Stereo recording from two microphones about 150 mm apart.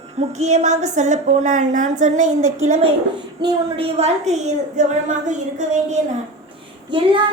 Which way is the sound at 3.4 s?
40° right (ahead or behind).